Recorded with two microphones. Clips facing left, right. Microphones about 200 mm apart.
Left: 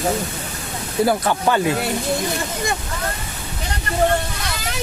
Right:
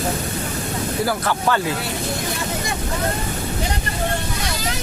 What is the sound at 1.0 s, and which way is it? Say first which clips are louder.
Speech: left 5 dB; 20° left (ahead or behind).